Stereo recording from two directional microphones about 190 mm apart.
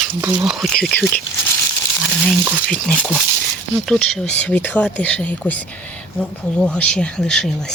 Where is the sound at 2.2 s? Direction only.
5° right (ahead or behind).